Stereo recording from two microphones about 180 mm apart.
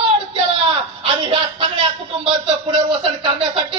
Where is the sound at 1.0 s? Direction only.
30° right (ahead or behind).